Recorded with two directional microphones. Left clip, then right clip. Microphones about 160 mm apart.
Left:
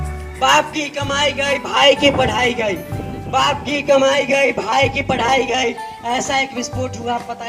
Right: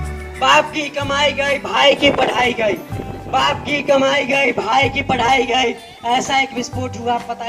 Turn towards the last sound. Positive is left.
turn(degrees=40)  # may be behind; listen again after turning